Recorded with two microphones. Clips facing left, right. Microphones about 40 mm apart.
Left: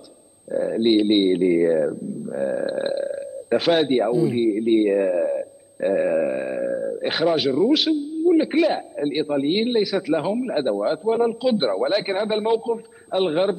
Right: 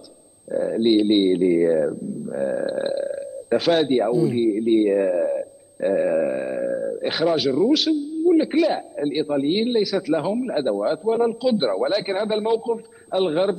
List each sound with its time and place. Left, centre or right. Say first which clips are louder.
0.6 s a man's voice: even; centre
6.7 s a sound: even; centre
7.0 s a man's voice: left 1 dB; centre